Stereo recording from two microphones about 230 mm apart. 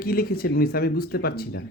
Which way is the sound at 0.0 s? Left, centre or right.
Left.